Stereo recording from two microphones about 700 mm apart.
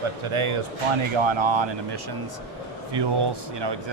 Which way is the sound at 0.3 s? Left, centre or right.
Right.